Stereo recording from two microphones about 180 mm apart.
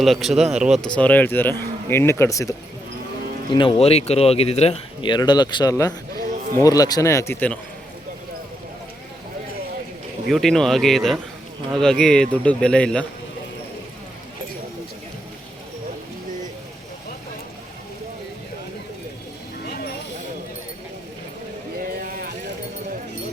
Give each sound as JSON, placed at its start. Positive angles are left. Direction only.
{"t": 0.0, "sound": "speech", "side_deg": 0}
{"t": 0.9, "sound": "speech", "side_deg": 10}
{"t": 3.5, "sound": "speech", "side_deg": 30}
{"t": 6.1, "sound": "a sound", "side_deg": -55}
{"t": 6.6, "sound": "speech", "side_deg": 20}
{"t": 10.2, "sound": "speech", "side_deg": 0}
{"t": 19.6, "sound": "a sound", "side_deg": 60}